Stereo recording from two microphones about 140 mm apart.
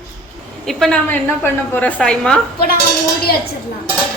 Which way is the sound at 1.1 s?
15° left (ahead or behind).